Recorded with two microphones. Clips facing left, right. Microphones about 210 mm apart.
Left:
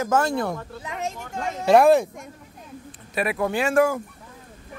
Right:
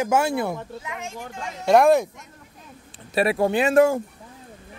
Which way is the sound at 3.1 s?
30° right (ahead or behind).